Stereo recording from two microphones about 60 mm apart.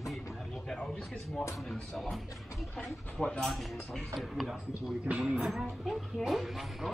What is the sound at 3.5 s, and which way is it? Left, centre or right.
Speech, centre.